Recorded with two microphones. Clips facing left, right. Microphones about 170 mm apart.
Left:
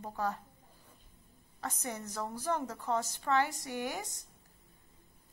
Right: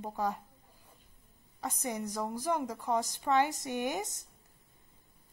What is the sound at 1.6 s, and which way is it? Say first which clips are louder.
A woman's voice: right 4 dB; 15° right (ahead or behind).